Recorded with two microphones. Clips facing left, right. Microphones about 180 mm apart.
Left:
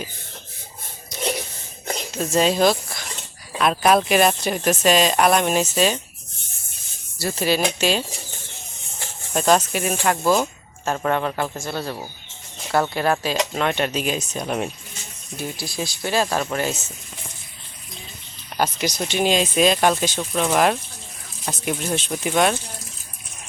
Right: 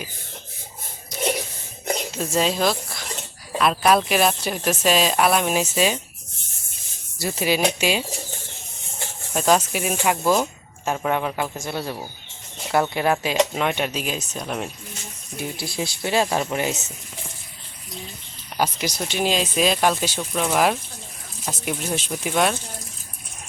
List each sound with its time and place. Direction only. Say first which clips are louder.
2.1 s speech: left 5 dB; centre (ahead or behind)
7.2 s speech: even; 10° right (ahead or behind)
9.3 s speech: left 1 dB; 5° right (ahead or behind)
15.5 s speech: right 1 dB; 25° right (ahead or behind)
18.5 s speech: left 1 dB; 10° right (ahead or behind)